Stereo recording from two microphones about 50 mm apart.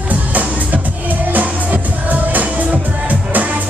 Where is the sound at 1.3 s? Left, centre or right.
Right.